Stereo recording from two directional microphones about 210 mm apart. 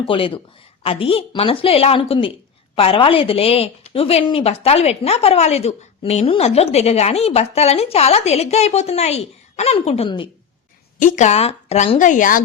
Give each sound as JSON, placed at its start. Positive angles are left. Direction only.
{"t": 0.1, "sound": "a woman's voice", "side_deg": 25}